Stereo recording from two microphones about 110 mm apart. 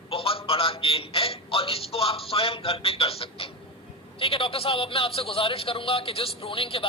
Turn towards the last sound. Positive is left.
turn(degrees=55)  # may be behind; listen again after turning